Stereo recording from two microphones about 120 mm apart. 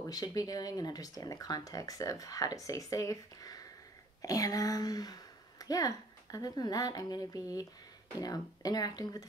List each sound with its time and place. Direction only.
0.0 s speech: 30° left (ahead or behind)